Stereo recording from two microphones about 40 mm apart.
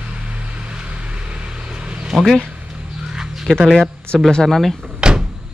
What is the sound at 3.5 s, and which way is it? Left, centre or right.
Speech, centre.